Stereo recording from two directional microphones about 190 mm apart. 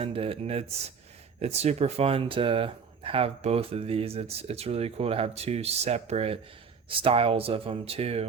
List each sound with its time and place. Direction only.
0.0 s speech: 30° right (ahead or behind)